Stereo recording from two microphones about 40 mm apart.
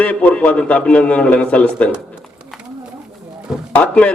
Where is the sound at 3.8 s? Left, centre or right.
Left.